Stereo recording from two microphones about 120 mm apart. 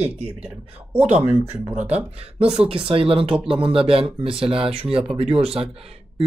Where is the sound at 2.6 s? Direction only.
50° right (ahead or behind).